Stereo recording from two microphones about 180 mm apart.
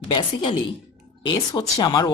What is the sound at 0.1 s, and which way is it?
Speech, 30° left (ahead or behind).